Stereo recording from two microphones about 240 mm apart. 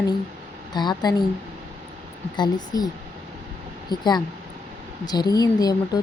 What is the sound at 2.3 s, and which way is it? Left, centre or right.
Speech, centre.